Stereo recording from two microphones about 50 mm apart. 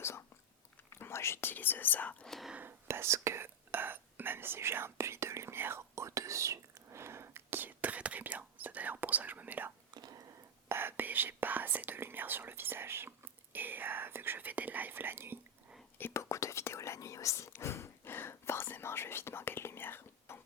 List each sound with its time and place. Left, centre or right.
0.9 s whispering: left
1.5 s speech: left
2.2 s speech: centre
2.8 s speech: right
5.5 s whispering: right
10.7 s speech: right
16.1 s speech: left
17.5 s speech: left